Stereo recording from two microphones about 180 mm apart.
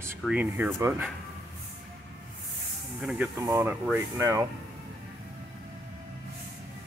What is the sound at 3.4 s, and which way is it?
Speech, 15° right (ahead or behind).